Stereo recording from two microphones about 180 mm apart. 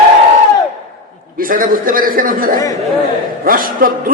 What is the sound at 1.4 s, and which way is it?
A woman's voice, 50° right (ahead or behind).